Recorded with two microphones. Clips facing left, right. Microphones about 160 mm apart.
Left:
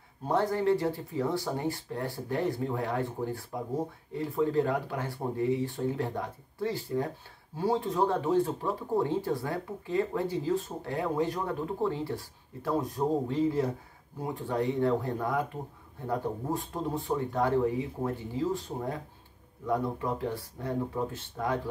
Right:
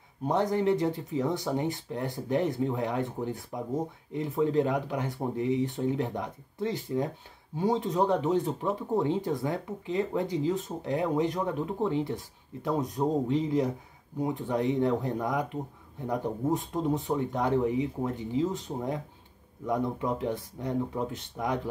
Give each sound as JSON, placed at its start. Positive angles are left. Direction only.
{"t": 0.3, "sound": "speech", "side_deg": -20}